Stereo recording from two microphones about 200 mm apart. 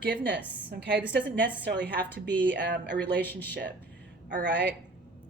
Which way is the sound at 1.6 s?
60° right (ahead or behind).